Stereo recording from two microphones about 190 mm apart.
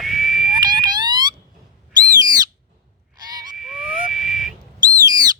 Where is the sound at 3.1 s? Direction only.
20° right (ahead or behind).